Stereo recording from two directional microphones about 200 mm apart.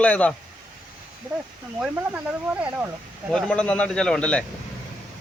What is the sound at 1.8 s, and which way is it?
Speech, 5° right (ahead or behind).